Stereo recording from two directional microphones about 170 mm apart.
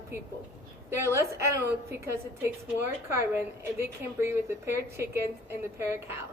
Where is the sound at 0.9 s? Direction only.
15° right (ahead or behind).